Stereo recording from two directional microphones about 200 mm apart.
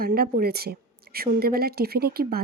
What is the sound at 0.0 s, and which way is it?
A woman's voice, 50° right (ahead or behind).